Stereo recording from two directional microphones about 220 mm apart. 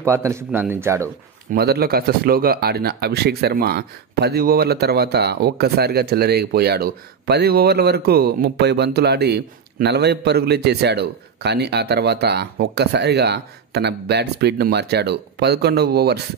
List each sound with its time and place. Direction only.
0.0 s speech: 15° right (ahead or behind)
1.5 s a man's voice: 45° right (ahead or behind)